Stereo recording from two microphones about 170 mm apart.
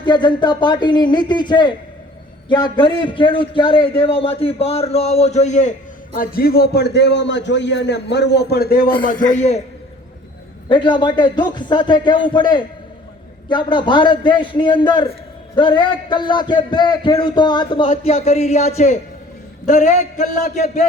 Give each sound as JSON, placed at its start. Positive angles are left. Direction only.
{"t": 0.0, "sound": "a man's voice", "side_deg": 25}
{"t": 6.1, "sound": "a man's voice", "side_deg": 60}
{"t": 9.0, "sound": "a man's voice", "side_deg": 50}
{"t": 10.7, "sound": "a man's voice", "side_deg": 30}